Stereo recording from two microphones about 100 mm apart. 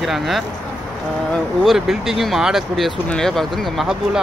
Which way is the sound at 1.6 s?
Centre (ahead or behind).